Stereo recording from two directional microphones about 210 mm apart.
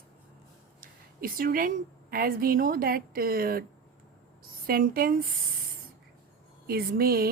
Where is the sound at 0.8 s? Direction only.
40° right (ahead or behind).